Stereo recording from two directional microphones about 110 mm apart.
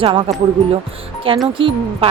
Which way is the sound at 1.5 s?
55° right (ahead or behind).